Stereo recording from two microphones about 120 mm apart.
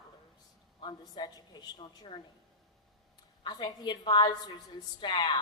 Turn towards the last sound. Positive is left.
turn(degrees=40)  # may be behind; listen again after turning